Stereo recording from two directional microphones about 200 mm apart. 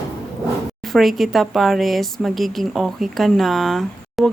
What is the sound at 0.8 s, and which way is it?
Speech, centre (ahead or behind).